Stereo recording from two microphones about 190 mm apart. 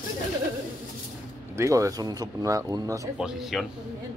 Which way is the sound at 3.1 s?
5° right (ahead or behind).